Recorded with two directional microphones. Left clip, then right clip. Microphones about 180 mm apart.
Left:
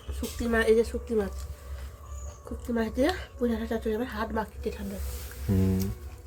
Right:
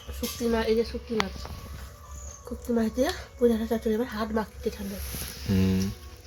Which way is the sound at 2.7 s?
35° right (ahead or behind).